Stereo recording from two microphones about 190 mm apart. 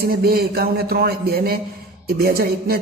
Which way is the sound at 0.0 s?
55° right (ahead or behind).